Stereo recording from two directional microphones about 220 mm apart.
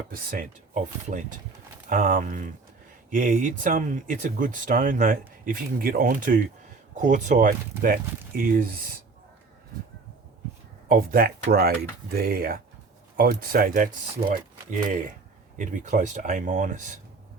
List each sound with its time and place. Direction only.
0.1 s speech: 40° right (ahead or behind)
10.9 s speech: 40° right (ahead or behind)